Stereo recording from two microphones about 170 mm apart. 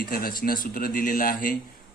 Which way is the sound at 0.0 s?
60° left (ahead or behind).